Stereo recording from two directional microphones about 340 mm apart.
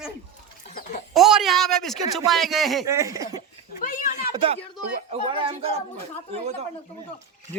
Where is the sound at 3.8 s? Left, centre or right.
Left.